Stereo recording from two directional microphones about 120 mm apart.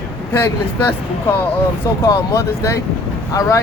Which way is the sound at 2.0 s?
25° left (ahead or behind).